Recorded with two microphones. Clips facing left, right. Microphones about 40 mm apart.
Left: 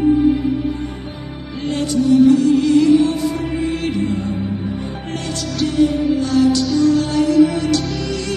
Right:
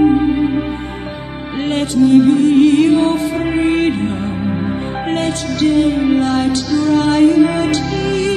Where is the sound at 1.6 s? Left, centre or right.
Right.